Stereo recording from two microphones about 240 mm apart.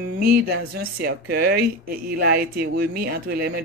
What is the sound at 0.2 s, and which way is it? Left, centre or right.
Speech, right.